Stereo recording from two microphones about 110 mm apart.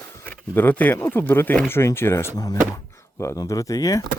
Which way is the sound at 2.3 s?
35° left (ahead or behind).